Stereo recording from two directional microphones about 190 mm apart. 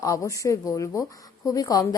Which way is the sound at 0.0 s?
15° left (ahead or behind).